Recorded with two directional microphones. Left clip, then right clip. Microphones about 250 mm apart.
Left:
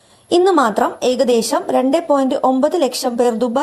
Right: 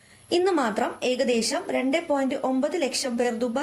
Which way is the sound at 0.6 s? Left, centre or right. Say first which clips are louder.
Left 10 dB; left.